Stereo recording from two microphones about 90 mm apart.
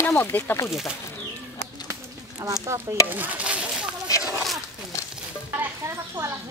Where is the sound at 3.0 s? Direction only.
20° right (ahead or behind).